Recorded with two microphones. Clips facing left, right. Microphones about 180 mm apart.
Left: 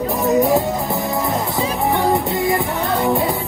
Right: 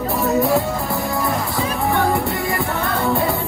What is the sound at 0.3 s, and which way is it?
Music, 20° left (ahead or behind).